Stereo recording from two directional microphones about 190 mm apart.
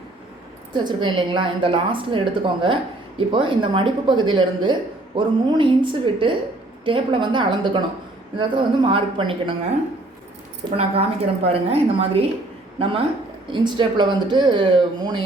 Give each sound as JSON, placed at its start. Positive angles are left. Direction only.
{"t": 0.7, "sound": "speech", "side_deg": -25}
{"t": 10.8, "sound": "a woman's voice", "side_deg": -30}